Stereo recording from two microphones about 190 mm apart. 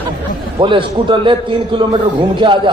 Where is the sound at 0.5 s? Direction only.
25° right (ahead or behind).